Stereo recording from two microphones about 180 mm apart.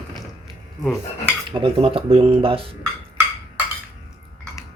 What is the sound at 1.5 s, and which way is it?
Speech, 25° right (ahead or behind).